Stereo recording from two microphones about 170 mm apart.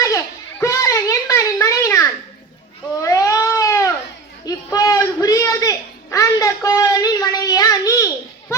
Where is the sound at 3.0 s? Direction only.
20° left (ahead or behind).